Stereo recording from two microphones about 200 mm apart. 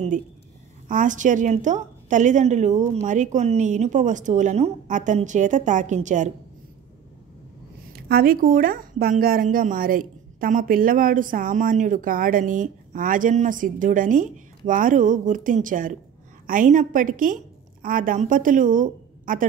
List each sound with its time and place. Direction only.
0.8 s a woman's voice: 40° right (ahead or behind)
7.9 s a woman's voice: 50° right (ahead or behind)